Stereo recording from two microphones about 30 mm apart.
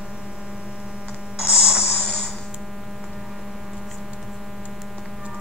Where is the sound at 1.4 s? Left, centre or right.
Right.